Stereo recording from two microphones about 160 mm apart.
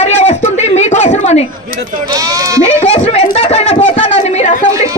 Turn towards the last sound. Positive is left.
turn(degrees=45)  # may be behind; listen again after turning